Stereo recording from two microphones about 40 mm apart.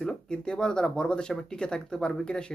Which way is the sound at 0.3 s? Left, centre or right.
Centre.